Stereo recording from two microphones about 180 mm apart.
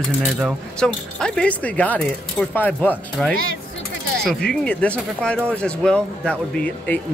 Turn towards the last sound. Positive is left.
turn(degrees=5)  # may be behind; listen again after turning